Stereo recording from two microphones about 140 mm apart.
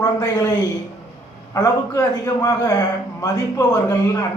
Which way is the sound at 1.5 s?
25° left (ahead or behind).